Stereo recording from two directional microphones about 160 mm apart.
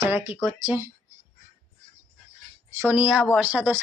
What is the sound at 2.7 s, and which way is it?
Speech, 15° right (ahead or behind).